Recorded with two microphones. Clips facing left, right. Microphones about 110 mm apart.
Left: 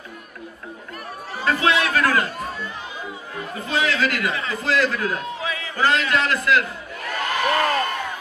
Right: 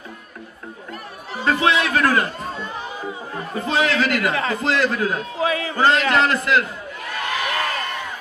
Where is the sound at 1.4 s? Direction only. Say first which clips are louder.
Right 1 dB; 25° right (ahead or behind).